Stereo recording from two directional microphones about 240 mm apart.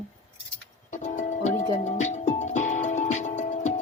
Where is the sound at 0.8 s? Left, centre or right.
Left.